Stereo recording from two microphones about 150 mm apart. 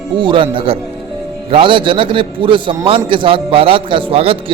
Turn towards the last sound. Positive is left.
turn(degrees=-40)  # may be behind; listen again after turning